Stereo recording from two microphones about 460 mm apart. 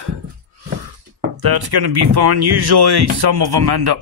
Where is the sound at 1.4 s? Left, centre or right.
Right.